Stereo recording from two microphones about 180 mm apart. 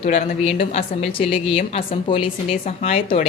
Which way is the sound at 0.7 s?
35° left (ahead or behind).